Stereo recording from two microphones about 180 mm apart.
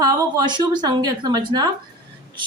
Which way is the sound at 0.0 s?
20° right (ahead or behind).